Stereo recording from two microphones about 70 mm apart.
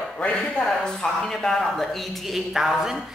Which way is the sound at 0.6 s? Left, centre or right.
Centre.